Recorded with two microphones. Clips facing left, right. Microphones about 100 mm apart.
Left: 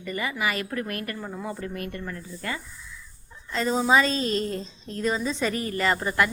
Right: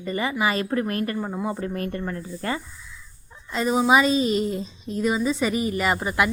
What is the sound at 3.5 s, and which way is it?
A woman's voice, 15° right (ahead or behind).